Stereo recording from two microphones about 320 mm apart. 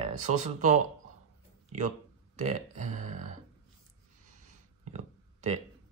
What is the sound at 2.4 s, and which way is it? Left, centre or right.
Speech, right.